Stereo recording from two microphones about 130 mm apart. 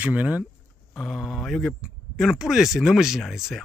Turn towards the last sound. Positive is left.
turn(degrees=0)  # may be behind; listen again after turning